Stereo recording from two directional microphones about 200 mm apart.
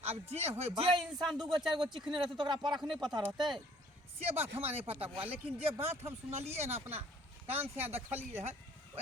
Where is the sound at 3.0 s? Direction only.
20° right (ahead or behind).